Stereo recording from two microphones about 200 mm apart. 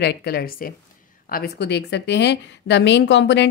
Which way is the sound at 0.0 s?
55° left (ahead or behind).